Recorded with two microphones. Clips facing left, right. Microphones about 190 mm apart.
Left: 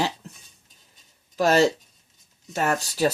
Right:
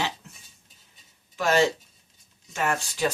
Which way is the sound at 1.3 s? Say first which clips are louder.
Left 3 dB; 40° left (ahead or behind).